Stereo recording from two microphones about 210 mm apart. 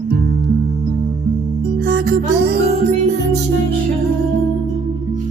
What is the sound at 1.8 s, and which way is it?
Music, 50° right (ahead or behind).